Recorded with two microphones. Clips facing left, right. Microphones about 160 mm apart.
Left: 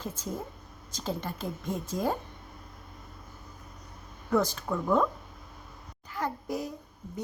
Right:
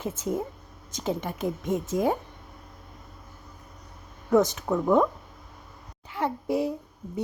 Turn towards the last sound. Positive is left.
turn(degrees=-30)  # may be behind; listen again after turning